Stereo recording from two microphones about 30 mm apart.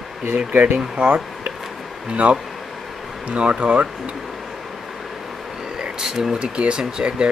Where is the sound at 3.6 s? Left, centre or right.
Right.